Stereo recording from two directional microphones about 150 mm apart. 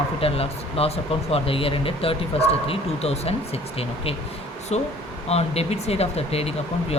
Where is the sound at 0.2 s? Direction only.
40° left (ahead or behind).